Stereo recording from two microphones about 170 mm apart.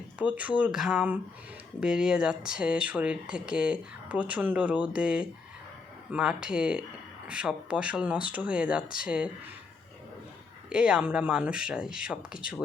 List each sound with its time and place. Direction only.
0.2 s speech: 10° right (ahead or behind)
10.7 s speech: 5° right (ahead or behind)